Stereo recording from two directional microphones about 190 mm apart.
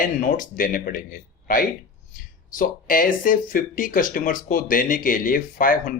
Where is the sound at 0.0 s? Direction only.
45° left (ahead or behind).